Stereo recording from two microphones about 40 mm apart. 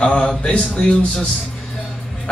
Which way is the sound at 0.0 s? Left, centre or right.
Left.